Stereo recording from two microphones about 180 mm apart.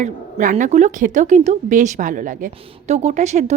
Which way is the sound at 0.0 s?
45° right (ahead or behind).